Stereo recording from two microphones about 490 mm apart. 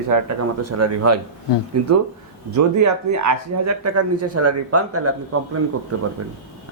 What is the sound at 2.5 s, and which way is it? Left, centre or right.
Speech, right.